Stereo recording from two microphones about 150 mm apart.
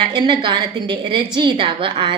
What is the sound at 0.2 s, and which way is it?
A woman's voice, 30° right (ahead or behind).